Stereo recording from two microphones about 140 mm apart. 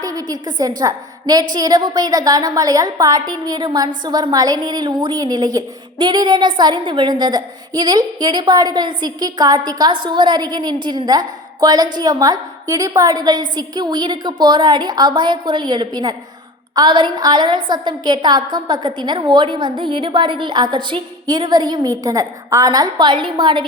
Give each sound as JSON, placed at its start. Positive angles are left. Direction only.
{"t": 0.0, "sound": "a woman's voice", "side_deg": -25}